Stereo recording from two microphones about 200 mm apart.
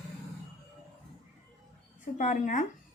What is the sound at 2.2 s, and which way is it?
Speech, 40° left (ahead or behind).